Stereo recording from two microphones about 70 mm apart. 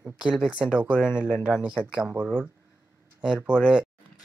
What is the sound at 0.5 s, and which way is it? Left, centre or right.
Speech, centre.